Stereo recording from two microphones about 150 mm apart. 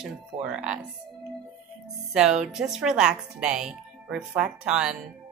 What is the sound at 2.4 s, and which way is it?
Speech, 5° right (ahead or behind).